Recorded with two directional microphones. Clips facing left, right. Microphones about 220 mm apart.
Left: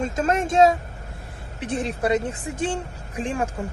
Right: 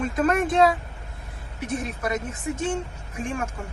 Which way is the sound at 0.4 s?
45° left (ahead or behind).